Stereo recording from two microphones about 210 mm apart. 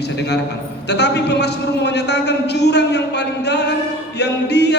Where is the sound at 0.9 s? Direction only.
55° left (ahead or behind).